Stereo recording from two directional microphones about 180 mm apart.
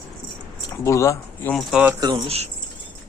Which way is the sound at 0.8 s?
15° left (ahead or behind).